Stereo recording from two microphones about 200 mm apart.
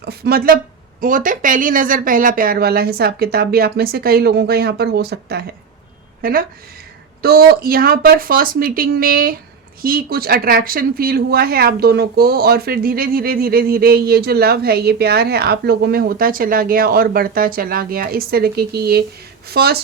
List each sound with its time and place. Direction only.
0.0 s speech: 50° right (ahead or behind)